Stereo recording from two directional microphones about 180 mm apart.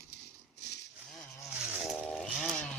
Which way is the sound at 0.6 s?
70° left (ahead or behind).